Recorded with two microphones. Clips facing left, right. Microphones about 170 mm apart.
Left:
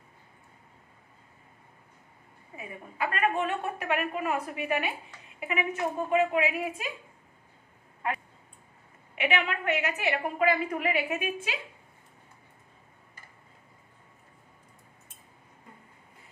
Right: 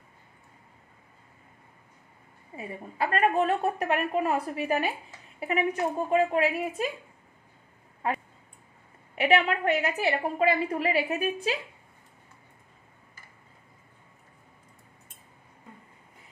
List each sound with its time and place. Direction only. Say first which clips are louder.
2.5 s a woman's voice: right 4 dB; 35° right (ahead or behind)
9.1 s a woman's voice: right 5 dB; 35° right (ahead or behind)